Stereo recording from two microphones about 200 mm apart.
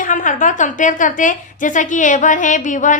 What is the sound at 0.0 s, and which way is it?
A woman's voice, 40° left (ahead or behind).